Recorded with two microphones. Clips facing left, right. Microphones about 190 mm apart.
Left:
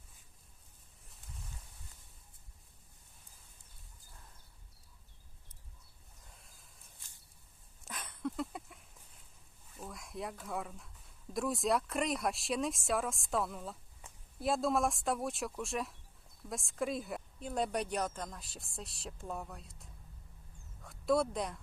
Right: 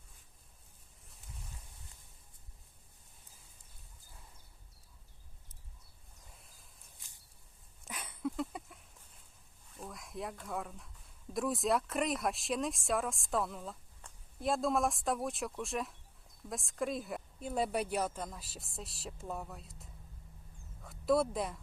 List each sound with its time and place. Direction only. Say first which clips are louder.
6.3 s a sound: even; centre (ahead or behind)
7.9 s dog: right 1 dB; 10° right (ahead or behind)
9.7 s speech: even; centre (ahead or behind)